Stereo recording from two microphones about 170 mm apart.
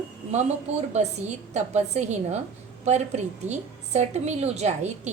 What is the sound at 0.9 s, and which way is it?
A woman's voice, 40° right (ahead or behind).